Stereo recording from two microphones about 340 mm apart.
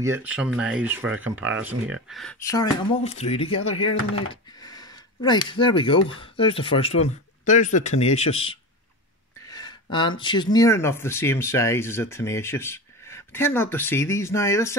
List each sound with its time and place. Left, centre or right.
0.0 s speech: centre